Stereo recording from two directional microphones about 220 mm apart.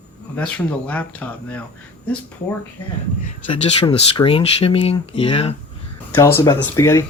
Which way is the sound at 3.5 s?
25° left (ahead or behind).